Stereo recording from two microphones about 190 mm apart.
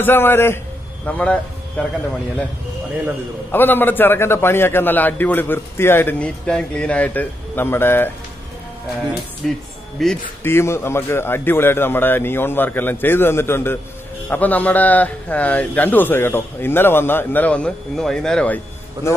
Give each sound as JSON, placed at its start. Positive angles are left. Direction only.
{"t": 0.0, "sound": "a man's voice", "side_deg": 10}
{"t": 3.5, "sound": "a man's voice", "side_deg": 10}
{"t": 9.4, "sound": "speech", "side_deg": 0}
{"t": 10.4, "sound": "a man's voice", "side_deg": 15}